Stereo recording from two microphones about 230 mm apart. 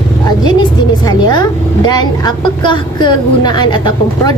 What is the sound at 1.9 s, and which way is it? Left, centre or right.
A woman's voice, centre.